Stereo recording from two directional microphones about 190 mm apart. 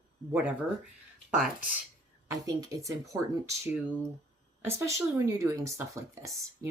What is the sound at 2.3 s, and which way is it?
Speech, 20° right (ahead or behind).